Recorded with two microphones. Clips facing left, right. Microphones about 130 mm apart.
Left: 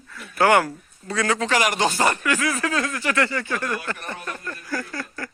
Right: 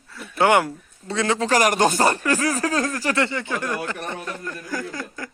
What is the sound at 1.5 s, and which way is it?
Speech, 45° right (ahead or behind).